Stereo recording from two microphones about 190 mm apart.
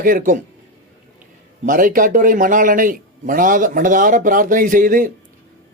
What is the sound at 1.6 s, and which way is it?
A man's voice, 45° right (ahead or behind).